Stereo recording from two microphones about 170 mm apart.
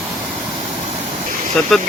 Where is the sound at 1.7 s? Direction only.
Centre (ahead or behind).